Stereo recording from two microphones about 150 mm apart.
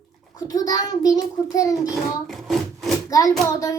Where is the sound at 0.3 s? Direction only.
25° left (ahead or behind).